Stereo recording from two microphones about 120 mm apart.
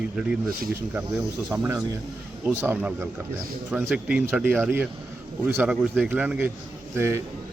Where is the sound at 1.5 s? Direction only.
15° right (ahead or behind).